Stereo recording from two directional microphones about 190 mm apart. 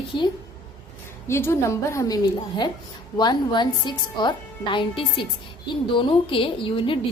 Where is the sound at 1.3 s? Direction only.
10° left (ahead or behind).